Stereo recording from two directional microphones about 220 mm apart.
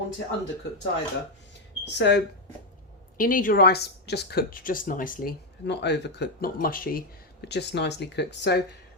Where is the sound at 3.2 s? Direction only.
40° left (ahead or behind).